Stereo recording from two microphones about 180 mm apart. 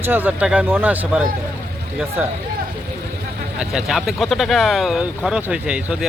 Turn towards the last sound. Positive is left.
turn(degrees=-5)  # may be behind; listen again after turning